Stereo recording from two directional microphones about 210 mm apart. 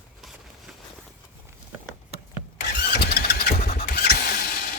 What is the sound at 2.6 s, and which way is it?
Vehicle, 50° left (ahead or behind).